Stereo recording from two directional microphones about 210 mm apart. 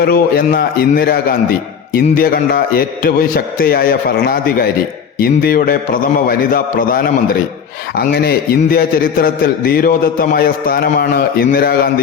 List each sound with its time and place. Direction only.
0.0 s a man's voice: 45° left (ahead or behind)